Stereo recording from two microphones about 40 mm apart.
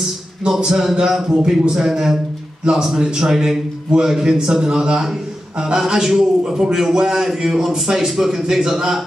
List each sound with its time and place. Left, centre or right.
0.6 s a man's voice: centre